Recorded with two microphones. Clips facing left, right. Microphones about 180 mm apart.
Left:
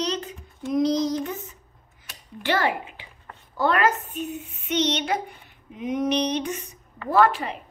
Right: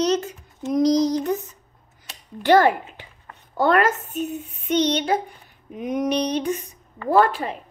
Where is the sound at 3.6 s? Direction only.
45° right (ahead or behind).